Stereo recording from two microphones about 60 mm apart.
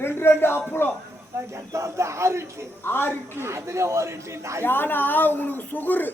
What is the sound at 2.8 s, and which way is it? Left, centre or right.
Speech, left.